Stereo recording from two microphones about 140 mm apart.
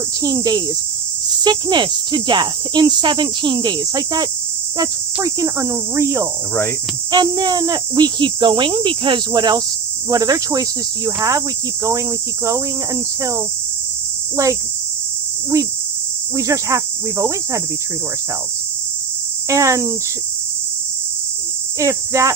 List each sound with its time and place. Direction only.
0.2 s cricket: 30° right (ahead or behind)
1.5 s insect: 30° right (ahead or behind)
5.2 s cricket: 25° right (ahead or behind)
7.1 s insect: 30° right (ahead or behind)
10.1 s cricket: 25° right (ahead or behind)
15.5 s cricket: 20° right (ahead or behind)
19.5 s cricket: 20° right (ahead or behind)
21.8 s cricket: 25° right (ahead or behind)